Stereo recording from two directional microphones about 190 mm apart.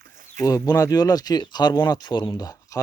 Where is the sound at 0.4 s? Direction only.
20° left (ahead or behind).